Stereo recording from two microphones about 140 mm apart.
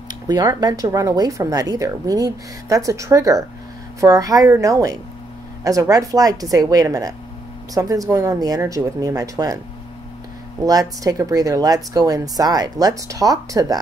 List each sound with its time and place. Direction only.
0.1 s speech: 30° right (ahead or behind)
10.6 s speech: 25° right (ahead or behind)